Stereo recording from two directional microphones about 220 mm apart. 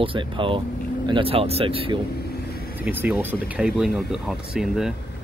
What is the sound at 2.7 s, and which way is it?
Speech, 10° right (ahead or behind).